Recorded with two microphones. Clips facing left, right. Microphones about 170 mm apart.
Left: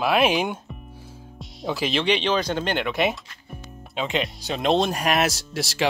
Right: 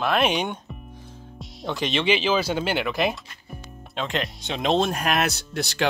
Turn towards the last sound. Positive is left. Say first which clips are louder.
# even
turn(degrees=0)  # may be behind; listen again after turning